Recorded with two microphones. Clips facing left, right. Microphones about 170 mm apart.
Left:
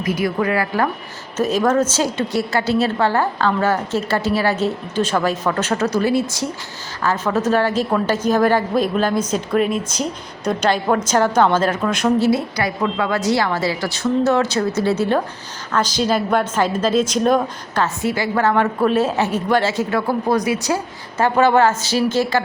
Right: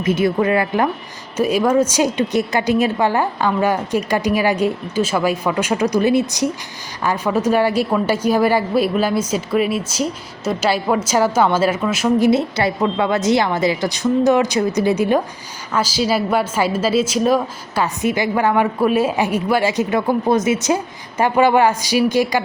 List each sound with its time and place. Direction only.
0.0 s a woman's voice: 25° right (ahead or behind); by 12.3 s 5° right (ahead or behind)
12.3 s a woman's voice: 25° right (ahead or behind); by 17.8 s 5° right (ahead or behind)
17.8 s a woman's voice: 20° right (ahead or behind)